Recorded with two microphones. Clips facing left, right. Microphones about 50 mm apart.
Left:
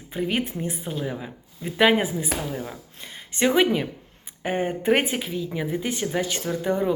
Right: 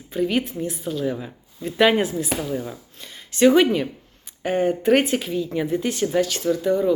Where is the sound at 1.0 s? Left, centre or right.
Centre.